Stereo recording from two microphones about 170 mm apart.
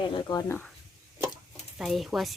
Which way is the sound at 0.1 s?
25° left (ahead or behind).